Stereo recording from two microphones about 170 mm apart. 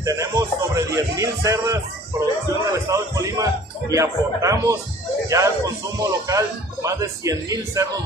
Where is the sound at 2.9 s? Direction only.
20° right (ahead or behind).